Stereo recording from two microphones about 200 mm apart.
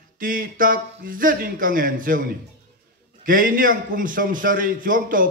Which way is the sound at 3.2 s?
45° right (ahead or behind).